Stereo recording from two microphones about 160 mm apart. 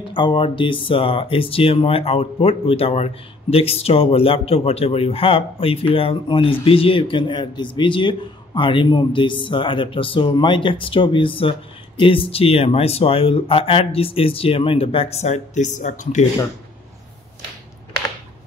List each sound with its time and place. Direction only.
0.1 s speech: 30° left (ahead or behind); by 16.3 s 50° left (ahead or behind)